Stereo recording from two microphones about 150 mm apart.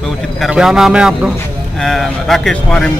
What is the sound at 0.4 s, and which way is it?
A man's voice, 5° right (ahead or behind).